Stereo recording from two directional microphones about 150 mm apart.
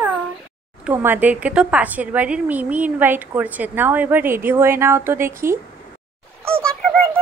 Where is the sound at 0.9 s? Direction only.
15° right (ahead or behind).